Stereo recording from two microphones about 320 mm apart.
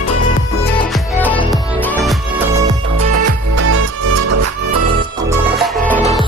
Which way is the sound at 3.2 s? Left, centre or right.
Right.